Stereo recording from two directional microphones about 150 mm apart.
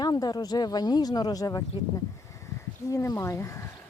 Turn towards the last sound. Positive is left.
turn(degrees=20)  # may be behind; listen again after turning